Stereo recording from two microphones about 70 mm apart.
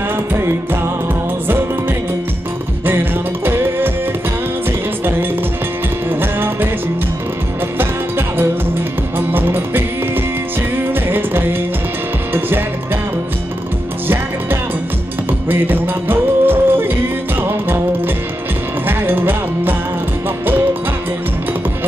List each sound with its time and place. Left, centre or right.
0.3 s music: right
2.8 s music: right
6.0 s music: right
7.8 s music: right
14.0 s music: right